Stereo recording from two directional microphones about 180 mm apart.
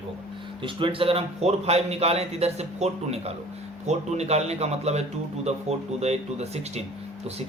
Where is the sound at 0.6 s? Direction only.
30° right (ahead or behind).